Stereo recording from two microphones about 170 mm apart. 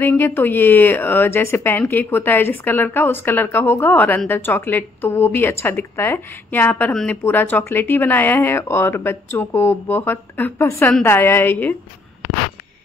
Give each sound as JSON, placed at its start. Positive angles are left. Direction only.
{"t": 0.0, "sound": "a woman's voice", "side_deg": 10}